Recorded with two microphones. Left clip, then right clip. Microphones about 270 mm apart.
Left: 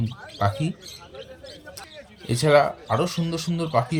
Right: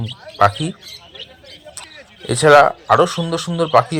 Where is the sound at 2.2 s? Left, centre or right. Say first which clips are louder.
Right 9 dB; right.